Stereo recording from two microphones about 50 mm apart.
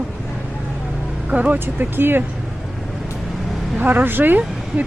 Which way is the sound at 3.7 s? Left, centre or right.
Right.